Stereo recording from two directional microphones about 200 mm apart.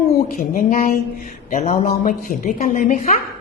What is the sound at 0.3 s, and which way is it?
Speech, 40° left (ahead or behind).